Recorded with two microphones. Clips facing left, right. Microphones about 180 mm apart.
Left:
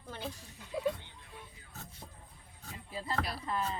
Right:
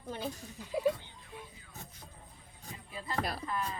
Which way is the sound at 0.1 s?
15° right (ahead or behind).